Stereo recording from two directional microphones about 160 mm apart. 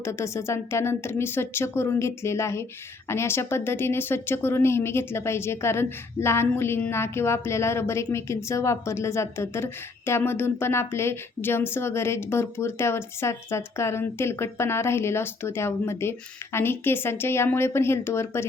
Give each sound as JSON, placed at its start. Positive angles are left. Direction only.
{"t": 0.0, "sound": "speech", "side_deg": 15}